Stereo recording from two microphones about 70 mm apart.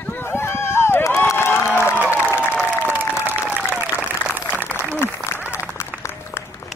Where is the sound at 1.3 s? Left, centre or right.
Left.